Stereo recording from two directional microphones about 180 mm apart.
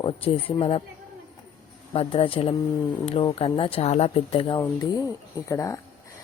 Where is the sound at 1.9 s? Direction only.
30° left (ahead or behind).